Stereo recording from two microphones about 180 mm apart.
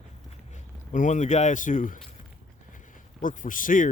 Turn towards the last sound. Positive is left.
turn(degrees=50)  # may be behind; listen again after turning